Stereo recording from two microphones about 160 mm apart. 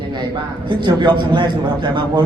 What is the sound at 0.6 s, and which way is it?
A man's voice, 30° right (ahead or behind).